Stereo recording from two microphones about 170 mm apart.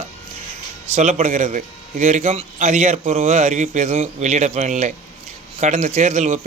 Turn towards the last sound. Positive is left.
turn(degrees=-45)  # may be behind; listen again after turning